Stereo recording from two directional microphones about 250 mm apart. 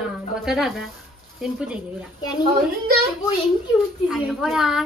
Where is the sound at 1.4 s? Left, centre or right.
Centre.